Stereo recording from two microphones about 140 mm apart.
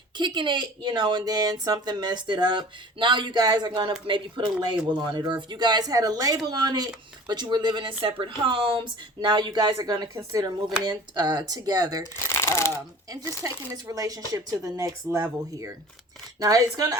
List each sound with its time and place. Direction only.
0.2 s speech: 35° right (ahead or behind)
12.3 s speech: 20° left (ahead or behind)
13.1 s speech: 25° right (ahead or behind)